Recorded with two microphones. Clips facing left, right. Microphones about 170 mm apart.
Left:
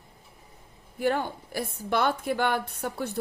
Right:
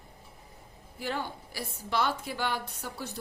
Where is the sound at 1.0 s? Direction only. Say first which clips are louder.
Left 8 dB; 55° left (ahead or behind).